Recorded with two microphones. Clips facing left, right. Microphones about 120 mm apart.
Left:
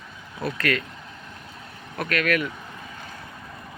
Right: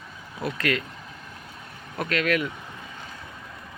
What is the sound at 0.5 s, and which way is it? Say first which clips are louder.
Speech: left 1 dB; 20° right (ahead or behind).